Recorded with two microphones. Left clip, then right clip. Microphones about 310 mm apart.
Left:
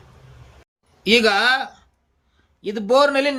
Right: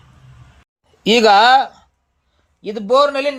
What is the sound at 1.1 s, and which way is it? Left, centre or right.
A man's voice, centre.